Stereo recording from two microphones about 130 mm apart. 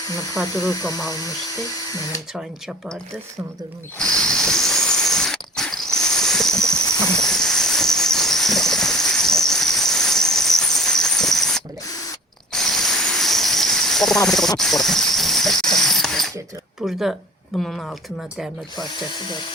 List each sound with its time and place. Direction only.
0.4 s speech: 25° left (ahead or behind)
2.3 s speech: 5° right (ahead or behind)
3.9 s a sound: 5° left (ahead or behind)
7.1 s cricket: 5° left (ahead or behind)
12.5 s a sound: centre (ahead or behind)
16.8 s speech: 5° right (ahead or behind)
18.9 s speech: 35° left (ahead or behind)